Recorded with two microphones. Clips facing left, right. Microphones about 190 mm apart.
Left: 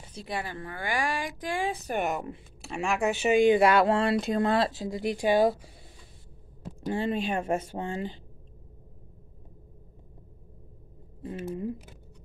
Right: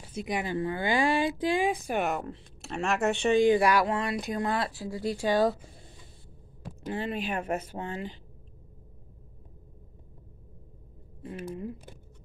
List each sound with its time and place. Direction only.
0.2 s a woman's voice: 20° right (ahead or behind)
2.0 s speech: centre (ahead or behind)
3.4 s speech: 25° left (ahead or behind)
6.9 s speech: 30° left (ahead or behind)
11.2 s speech: 25° left (ahead or behind)